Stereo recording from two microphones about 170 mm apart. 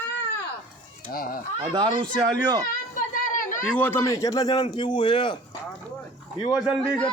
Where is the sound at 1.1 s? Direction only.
60° left (ahead or behind).